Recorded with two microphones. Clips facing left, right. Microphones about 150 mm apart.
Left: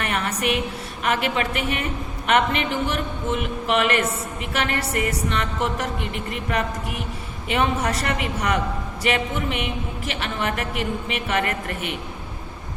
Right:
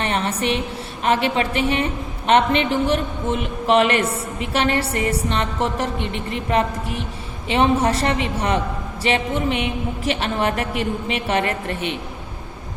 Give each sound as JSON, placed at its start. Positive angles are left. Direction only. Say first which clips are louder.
{"t": 0.0, "sound": "a woman's voice", "louder": "right 3 dB", "side_deg": -30}